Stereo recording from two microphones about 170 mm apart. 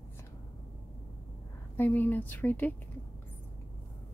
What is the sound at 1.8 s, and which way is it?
Speech, 10° left (ahead or behind).